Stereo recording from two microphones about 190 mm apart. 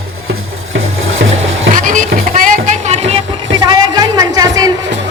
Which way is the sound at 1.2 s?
65° right (ahead or behind).